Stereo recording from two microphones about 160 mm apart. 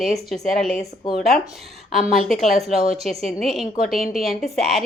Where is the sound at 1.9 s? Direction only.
Centre (ahead or behind).